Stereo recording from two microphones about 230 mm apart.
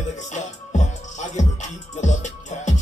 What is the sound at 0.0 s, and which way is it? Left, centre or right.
Music, left.